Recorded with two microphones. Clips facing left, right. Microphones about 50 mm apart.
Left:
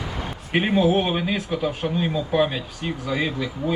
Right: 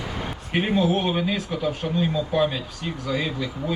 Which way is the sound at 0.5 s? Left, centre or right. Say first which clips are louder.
Left 3 dB; left.